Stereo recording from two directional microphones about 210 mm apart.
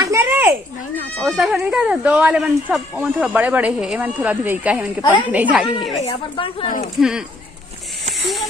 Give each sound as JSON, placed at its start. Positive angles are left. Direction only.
{"t": 0.0, "sound": "a sound", "side_deg": -15}
{"t": 1.2, "sound": "speech", "side_deg": 0}
{"t": 6.0, "sound": "speech", "side_deg": 25}
{"t": 6.7, "sound": "speech", "side_deg": 40}
{"t": 7.0, "sound": "speech", "side_deg": -5}